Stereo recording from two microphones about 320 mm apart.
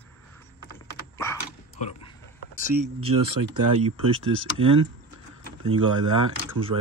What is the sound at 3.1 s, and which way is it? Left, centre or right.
Speech, right.